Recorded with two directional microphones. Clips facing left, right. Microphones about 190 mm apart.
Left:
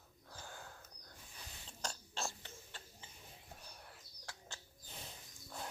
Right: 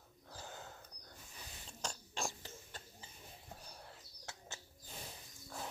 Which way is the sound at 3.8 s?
25° right (ahead or behind).